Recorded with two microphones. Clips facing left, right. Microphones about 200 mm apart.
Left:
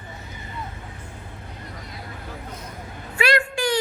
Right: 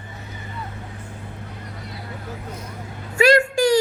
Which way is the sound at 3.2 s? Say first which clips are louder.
Right 7 dB; 45° right (ahead or behind).